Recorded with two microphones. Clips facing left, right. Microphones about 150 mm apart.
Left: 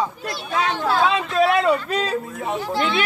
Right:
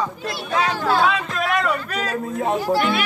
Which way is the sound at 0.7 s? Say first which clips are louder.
Even; centre (ahead or behind).